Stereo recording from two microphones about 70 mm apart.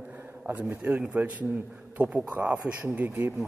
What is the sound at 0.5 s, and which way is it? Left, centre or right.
Speech, right.